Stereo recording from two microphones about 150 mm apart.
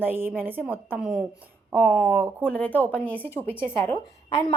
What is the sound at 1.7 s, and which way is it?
A woman's voice, 5° left (ahead or behind).